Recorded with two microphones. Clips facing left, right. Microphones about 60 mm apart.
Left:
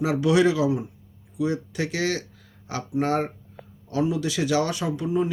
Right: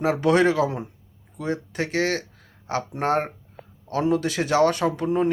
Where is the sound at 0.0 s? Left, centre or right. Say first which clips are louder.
Right 1 dB; right.